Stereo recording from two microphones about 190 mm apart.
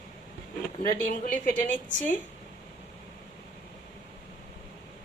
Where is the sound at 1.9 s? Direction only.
40° left (ahead or behind).